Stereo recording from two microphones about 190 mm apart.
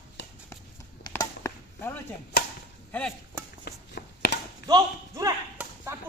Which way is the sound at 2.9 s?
5° left (ahead or behind).